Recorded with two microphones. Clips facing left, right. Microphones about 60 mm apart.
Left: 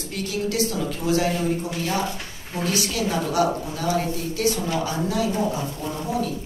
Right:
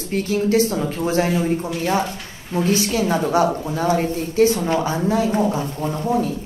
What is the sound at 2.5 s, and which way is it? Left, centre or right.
Speech, right.